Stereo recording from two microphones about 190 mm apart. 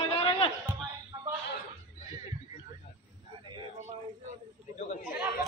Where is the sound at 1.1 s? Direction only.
20° right (ahead or behind).